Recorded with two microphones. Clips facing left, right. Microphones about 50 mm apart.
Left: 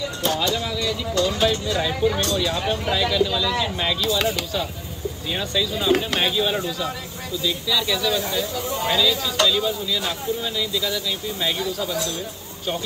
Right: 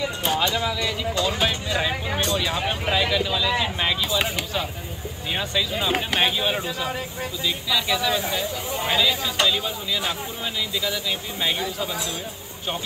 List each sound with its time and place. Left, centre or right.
0.2 s speech: centre
11.4 s speech: right